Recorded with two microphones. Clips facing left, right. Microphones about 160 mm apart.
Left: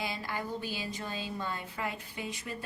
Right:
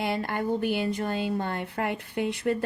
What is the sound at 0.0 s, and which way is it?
Speech, 60° right (ahead or behind).